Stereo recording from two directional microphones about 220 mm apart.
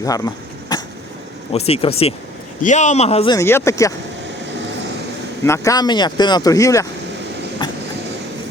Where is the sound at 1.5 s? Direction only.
25° left (ahead or behind).